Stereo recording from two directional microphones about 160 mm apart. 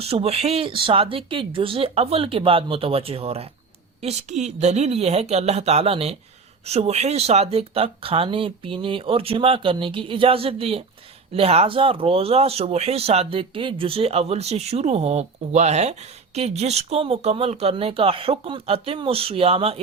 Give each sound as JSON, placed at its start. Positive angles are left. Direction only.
{"t": 0.0, "sound": "speech", "side_deg": -40}